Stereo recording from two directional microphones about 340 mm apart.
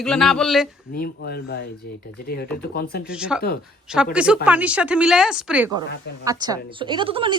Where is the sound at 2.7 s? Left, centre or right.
Left.